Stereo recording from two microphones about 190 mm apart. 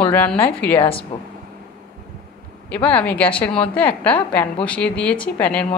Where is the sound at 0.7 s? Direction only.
30° left (ahead or behind).